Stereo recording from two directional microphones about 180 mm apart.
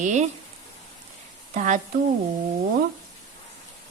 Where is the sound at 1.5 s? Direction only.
45° right (ahead or behind).